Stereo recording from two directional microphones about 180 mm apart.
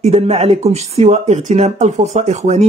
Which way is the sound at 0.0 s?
35° right (ahead or behind).